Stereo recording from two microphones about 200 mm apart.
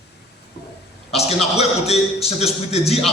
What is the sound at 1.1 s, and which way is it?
A man's voice, 30° left (ahead or behind).